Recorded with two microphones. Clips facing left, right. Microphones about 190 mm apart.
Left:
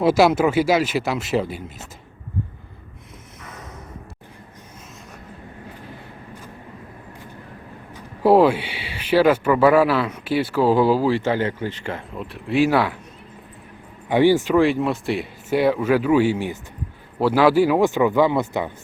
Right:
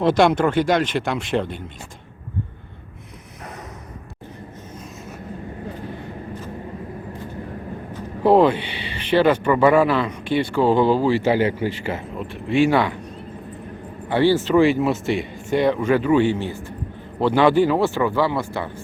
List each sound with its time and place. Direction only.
0.0 s speech: 5° left (ahead or behind)
7.9 s speech: 5° left (ahead or behind)
11.2 s speech: 10° right (ahead or behind)
14.1 s speech: 15° left (ahead or behind)
14.5 s speech: centre (ahead or behind); by 18.7 s 20° left (ahead or behind)